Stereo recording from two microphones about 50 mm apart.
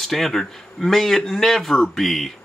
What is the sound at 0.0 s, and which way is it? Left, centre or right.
Speech, centre.